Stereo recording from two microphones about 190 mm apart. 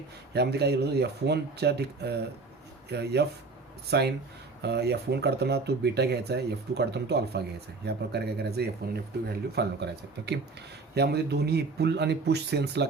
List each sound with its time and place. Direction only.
0.3 s speech: 60° right (ahead or behind)